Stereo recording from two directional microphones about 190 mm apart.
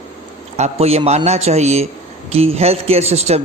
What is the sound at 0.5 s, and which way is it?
A man's voice, 35° right (ahead or behind).